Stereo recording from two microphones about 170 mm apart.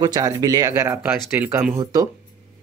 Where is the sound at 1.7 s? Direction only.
20° right (ahead or behind).